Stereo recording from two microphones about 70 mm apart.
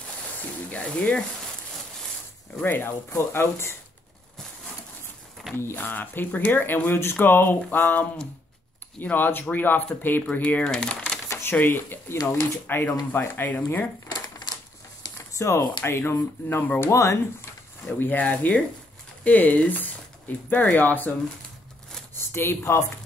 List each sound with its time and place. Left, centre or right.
0.4 s sizzle: left
2.6 s speech: left
5.6 s speech: left; by 11.1 s centre
11.2 s a sound: left
11.5 s speech: left
14.1 s crumpling: left
15.1 s a sound: left
15.8 s speech: left
16.2 s speech: left
16.9 s speech: left
17.8 s speech: left
22.1 s a sound: left
22.6 s speech: left